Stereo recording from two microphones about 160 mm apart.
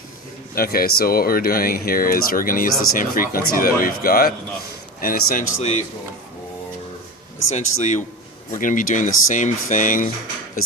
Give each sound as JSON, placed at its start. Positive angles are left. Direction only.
{"t": 0.5, "sound": "speech", "side_deg": 70}
{"t": 7.5, "sound": "a man's voice", "side_deg": 50}